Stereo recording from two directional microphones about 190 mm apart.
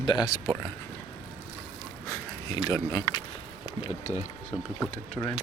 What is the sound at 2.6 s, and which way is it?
Speech, 20° left (ahead or behind).